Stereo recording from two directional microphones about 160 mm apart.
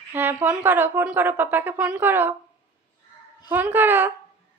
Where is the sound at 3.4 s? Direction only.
15° right (ahead or behind).